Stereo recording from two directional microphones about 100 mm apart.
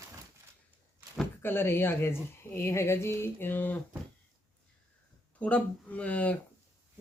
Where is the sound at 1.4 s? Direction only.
25° left (ahead or behind).